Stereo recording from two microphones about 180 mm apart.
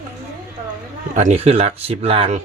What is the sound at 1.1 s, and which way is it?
Speech, 40° right (ahead or behind).